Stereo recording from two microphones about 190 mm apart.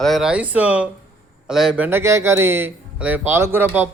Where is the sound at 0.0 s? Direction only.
Centre (ahead or behind).